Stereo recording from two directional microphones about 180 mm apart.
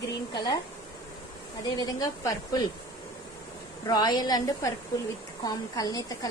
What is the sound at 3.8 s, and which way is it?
A woman's voice, 25° left (ahead or behind).